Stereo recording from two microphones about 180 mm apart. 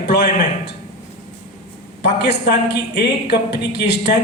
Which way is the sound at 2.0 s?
65° left (ahead or behind).